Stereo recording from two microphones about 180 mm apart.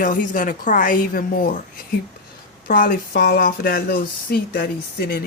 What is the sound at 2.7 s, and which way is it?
Speech, 55° left (ahead or behind).